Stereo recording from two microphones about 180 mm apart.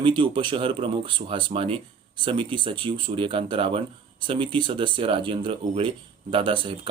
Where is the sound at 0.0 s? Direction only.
30° right (ahead or behind).